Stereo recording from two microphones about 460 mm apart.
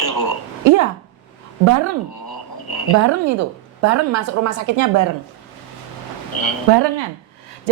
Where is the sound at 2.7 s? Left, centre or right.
Left.